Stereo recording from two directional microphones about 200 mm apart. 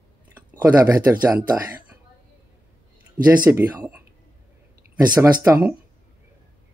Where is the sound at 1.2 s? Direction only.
10° right (ahead or behind).